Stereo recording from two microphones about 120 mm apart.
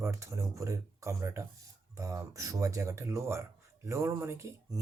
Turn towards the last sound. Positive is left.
turn(degrees=-20)  # may be behind; listen again after turning